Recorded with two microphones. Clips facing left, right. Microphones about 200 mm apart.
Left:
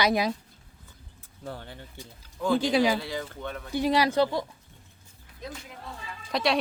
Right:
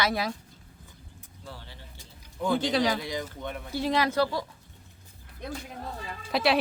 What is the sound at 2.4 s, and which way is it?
Speech, 25° right (ahead or behind).